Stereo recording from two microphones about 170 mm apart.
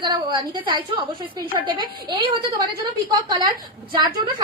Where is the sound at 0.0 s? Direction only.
25° right (ahead or behind).